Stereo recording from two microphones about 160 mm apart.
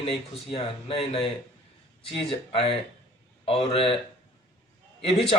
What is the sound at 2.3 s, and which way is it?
Speech, 35° left (ahead or behind).